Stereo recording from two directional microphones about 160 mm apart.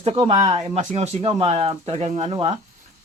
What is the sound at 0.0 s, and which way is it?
Speech, 35° right (ahead or behind).